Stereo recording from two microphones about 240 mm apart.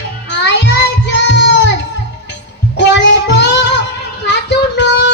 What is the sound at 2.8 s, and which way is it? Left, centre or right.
Child singing, left.